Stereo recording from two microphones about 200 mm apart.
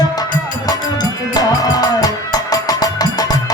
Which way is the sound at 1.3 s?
20° left (ahead or behind).